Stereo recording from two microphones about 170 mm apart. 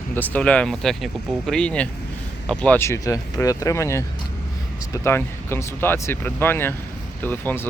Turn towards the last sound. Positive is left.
turn(degrees=10)  # may be behind; listen again after turning